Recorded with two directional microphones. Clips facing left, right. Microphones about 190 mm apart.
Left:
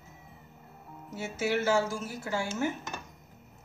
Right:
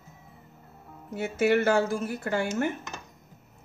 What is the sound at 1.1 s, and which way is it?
A woman's voice, 55° right (ahead or behind).